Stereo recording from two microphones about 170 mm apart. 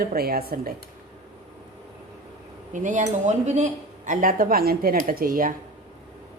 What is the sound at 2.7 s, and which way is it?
Speech, 45° right (ahead or behind).